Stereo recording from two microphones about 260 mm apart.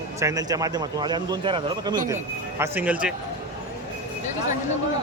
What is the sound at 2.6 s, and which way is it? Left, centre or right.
Speech, centre.